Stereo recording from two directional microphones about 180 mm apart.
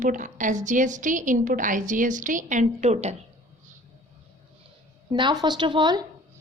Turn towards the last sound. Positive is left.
turn(degrees=-25)  # may be behind; listen again after turning